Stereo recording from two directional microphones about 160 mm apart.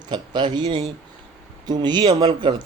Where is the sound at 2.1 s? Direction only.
40° right (ahead or behind).